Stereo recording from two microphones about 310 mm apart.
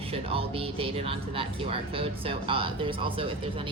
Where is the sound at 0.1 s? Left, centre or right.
Centre.